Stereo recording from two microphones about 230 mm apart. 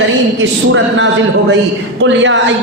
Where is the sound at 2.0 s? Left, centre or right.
Right.